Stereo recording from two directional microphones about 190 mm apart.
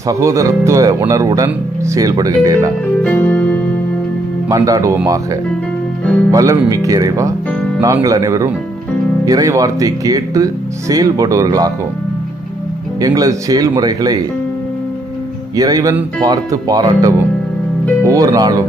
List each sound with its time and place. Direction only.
0.1 s speech: 15° right (ahead or behind)
3.0 s music: 10° left (ahead or behind)
4.4 s speech: 20° right (ahead or behind)
13.0 s speech: 20° right (ahead or behind)
15.5 s speech: 20° right (ahead or behind)